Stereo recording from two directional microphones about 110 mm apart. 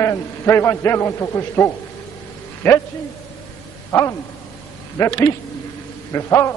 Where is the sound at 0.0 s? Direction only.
20° left (ahead or behind).